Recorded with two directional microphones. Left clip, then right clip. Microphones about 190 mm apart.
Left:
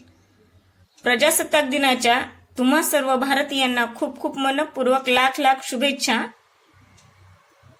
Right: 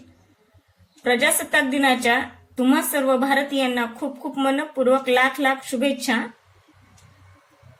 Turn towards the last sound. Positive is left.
turn(degrees=55)  # may be behind; listen again after turning